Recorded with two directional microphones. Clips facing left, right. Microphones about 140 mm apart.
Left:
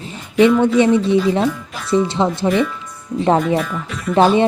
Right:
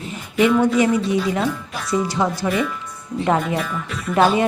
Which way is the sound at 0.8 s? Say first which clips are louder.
Left 5 dB; 25° left (ahead or behind).